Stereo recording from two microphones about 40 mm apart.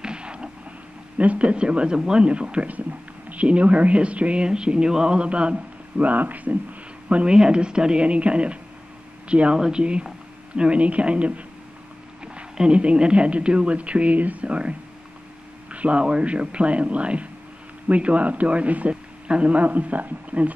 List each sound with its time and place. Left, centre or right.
0.0 s a sound: right
1.1 s a woman's voice: right
2.7 s speech: right
6.0 s speech: right
7.2 s a woman's voice: right
19.6 s speech: right